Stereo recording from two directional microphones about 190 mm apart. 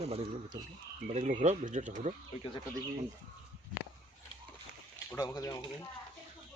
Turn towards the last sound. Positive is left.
turn(degrees=15)  # may be behind; listen again after turning